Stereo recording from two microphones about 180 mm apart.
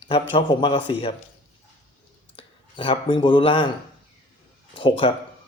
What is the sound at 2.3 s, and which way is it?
Speech, 30° left (ahead or behind).